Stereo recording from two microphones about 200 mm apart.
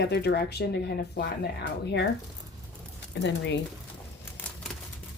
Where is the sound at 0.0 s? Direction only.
55° left (ahead or behind).